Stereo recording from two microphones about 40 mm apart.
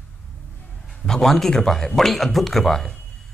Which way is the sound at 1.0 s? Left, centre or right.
Centre.